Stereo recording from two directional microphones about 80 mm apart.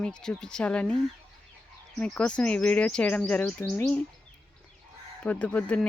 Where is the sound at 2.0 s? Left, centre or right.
Centre.